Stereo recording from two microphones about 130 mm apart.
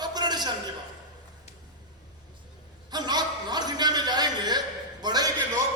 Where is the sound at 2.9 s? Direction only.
35° right (ahead or behind).